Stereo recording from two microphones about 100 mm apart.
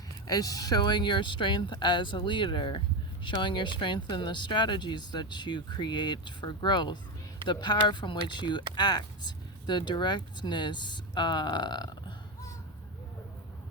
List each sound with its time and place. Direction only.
0.3 s speech: 40° left (ahead or behind)